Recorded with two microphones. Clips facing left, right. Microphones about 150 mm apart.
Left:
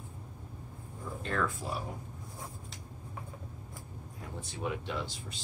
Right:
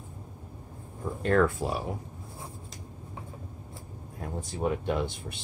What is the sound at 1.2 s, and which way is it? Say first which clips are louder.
Speech: right 10 dB; 60° right (ahead or behind).